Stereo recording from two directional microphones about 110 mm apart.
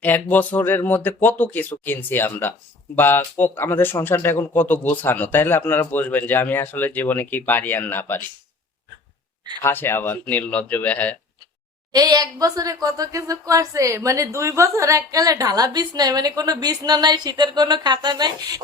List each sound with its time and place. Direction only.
0.0 s speech: 15° left (ahead or behind)
9.6 s speech: 20° left (ahead or behind)
11.9 s speech: 40° right (ahead or behind)